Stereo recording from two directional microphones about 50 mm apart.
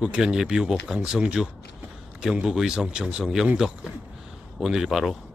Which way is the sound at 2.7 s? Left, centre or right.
Centre.